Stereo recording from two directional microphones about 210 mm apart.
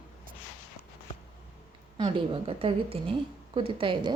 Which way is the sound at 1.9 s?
25° right (ahead or behind).